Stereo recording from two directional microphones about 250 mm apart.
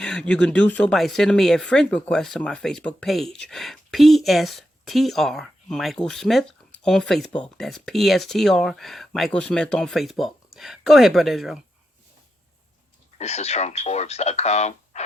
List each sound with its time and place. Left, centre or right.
0.0 s speech: centre
13.1 s speech: left